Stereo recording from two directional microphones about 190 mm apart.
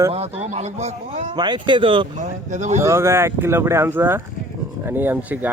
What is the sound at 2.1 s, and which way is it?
Speech, 40° right (ahead or behind).